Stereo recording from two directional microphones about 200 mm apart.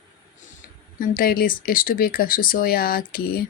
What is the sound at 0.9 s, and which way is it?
Speech, 45° left (ahead or behind).